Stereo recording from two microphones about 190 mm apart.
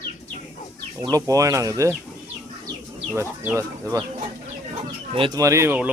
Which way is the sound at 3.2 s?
15° right (ahead or behind).